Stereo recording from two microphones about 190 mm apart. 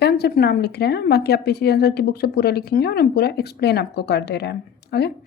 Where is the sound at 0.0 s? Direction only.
55° left (ahead or behind).